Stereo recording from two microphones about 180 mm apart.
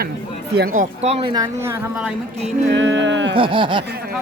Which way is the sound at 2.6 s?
90° right.